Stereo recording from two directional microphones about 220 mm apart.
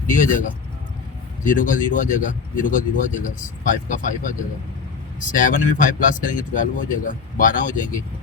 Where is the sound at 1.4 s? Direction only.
35° left (ahead or behind).